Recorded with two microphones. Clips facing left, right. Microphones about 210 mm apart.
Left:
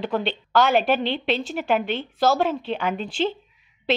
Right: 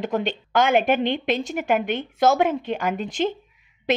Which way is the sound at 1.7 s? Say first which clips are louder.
Even; 15° right (ahead or behind).